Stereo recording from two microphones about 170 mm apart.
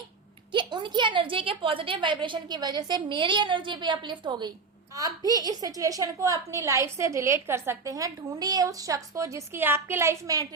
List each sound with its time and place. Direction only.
0.5 s a woman's voice: 25° right (ahead or behind)